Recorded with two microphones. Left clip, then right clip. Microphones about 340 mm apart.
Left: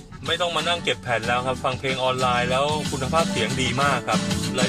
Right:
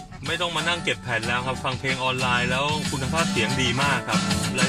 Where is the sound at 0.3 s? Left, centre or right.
Left.